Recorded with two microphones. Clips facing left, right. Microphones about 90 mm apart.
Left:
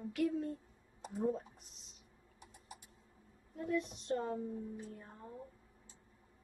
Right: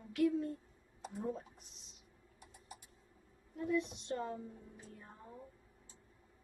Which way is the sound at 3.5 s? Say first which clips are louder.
Right 1 dB; 45° left (ahead or behind).